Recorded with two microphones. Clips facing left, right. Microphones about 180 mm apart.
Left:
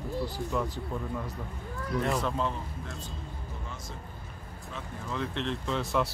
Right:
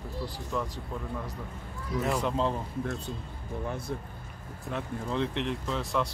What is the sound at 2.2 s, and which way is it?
Speech, 25° right (ahead or behind).